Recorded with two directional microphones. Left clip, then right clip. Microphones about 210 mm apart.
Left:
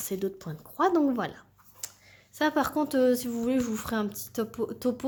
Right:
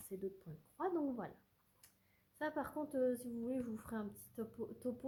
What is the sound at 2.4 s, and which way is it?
Speech, 30° left (ahead or behind).